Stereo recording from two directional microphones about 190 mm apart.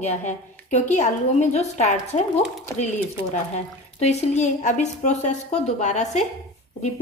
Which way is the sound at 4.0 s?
35° left (ahead or behind).